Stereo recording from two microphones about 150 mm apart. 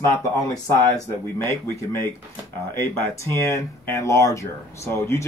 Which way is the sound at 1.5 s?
15° left (ahead or behind).